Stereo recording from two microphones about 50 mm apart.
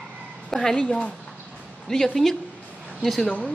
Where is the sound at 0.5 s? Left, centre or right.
Centre.